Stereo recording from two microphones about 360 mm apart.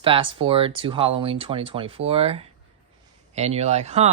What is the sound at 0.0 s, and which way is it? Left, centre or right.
Speech, centre.